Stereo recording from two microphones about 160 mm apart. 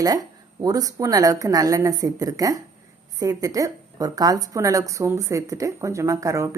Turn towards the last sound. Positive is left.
turn(degrees=-20)  # may be behind; listen again after turning